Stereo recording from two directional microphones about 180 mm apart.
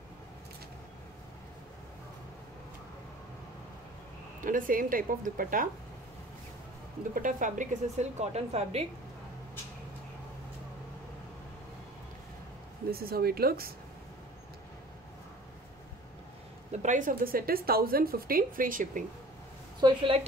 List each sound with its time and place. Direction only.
4.4 s a woman's voice: 50° right (ahead or behind)
7.2 s a woman's voice: 45° right (ahead or behind)
12.9 s speech: 60° right (ahead or behind)
16.7 s a woman's voice: 45° right (ahead or behind)
19.8 s a woman's voice: 25° right (ahead or behind)